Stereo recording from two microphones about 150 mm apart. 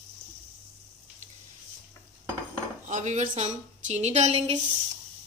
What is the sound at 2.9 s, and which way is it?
Speech, 55° right (ahead or behind).